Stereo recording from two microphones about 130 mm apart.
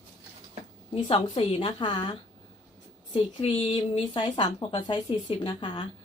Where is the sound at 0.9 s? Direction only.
45° left (ahead or behind).